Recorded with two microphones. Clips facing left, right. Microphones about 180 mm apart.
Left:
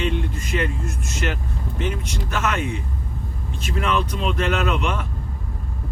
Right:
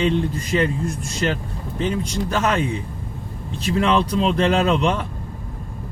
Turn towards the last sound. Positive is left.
turn(degrees=-35)  # may be behind; listen again after turning